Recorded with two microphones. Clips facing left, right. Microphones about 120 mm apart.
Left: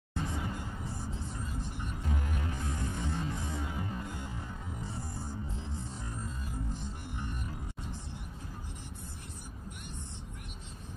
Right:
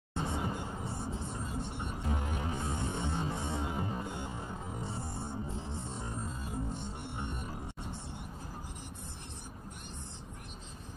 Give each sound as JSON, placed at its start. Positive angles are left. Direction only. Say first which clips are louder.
{"t": 0.1, "sound": "vehicle", "louder": "right 2 dB", "side_deg": -30}
{"t": 4.8, "sound": "music", "louder": "right 1 dB", "side_deg": -30}